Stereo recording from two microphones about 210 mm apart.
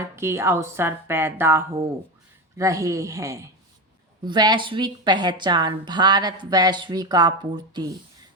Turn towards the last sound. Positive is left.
turn(degrees=-20)  # may be behind; listen again after turning